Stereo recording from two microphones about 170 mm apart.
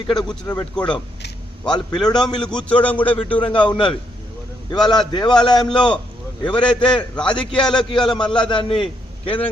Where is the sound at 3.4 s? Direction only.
30° left (ahead or behind).